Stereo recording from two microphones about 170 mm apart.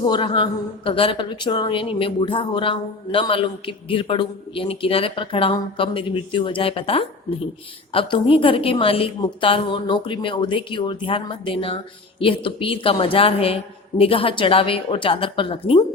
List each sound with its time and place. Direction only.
0.0 s speech: 30° left (ahead or behind)